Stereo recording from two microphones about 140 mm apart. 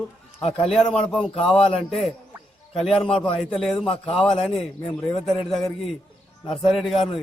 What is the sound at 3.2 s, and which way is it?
Speech, 5° left (ahead or behind).